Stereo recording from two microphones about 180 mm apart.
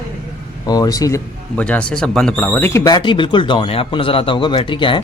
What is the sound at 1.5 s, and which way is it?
Speech, 5° left (ahead or behind).